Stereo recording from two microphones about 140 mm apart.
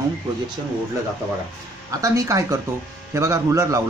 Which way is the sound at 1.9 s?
25° right (ahead or behind).